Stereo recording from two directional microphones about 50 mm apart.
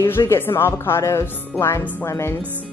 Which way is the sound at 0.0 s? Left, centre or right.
Left.